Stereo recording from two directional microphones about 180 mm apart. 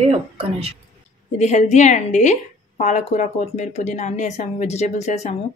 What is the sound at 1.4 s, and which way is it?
A woman's voice, 40° left (ahead or behind).